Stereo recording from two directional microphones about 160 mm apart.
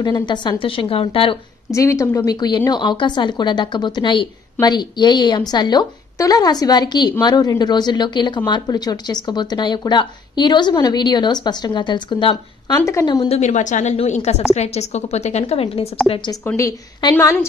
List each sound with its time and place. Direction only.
0.0 s a woman's voice: 30° left (ahead or behind)
1.7 s a woman's voice: 20° left (ahead or behind)
13.4 s a woman's voice: 50° left (ahead or behind); by 16.3 s 30° left (ahead or behind)
16.4 s a woman's voice: 20° left (ahead or behind)